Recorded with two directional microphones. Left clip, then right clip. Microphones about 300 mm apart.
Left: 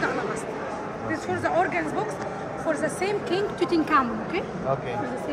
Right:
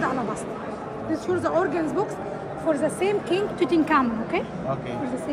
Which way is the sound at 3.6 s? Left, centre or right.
Centre.